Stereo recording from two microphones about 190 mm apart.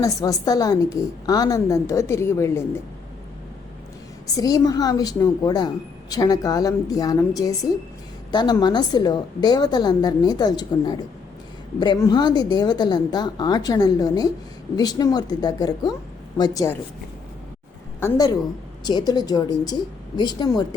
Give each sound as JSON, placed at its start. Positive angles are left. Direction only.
{"t": 0.0, "sound": "a woman's voice", "side_deg": 15}
{"t": 4.3, "sound": "speech", "side_deg": 20}
{"t": 18.9, "sound": "speech", "side_deg": 20}